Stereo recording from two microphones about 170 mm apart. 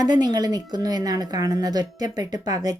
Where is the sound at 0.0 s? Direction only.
25° right (ahead or behind).